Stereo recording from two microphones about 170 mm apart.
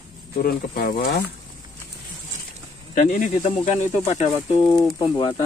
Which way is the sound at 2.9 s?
50° left (ahead or behind).